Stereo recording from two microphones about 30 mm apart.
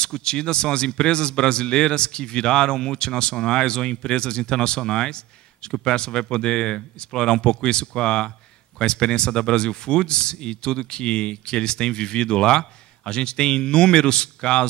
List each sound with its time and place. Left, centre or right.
0.0 s speech: left